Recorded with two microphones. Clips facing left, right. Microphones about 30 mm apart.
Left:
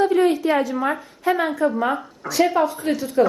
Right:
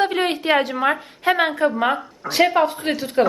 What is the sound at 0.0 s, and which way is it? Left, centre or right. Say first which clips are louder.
A woman's voice: left 3 dB; right.